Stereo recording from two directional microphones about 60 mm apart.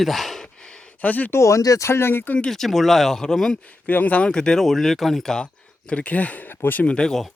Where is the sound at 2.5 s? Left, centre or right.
Centre.